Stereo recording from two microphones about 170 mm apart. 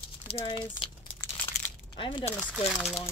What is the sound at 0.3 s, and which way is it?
Speech, 30° left (ahead or behind).